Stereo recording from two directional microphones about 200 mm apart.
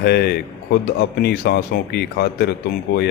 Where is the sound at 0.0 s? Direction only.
55° left (ahead or behind).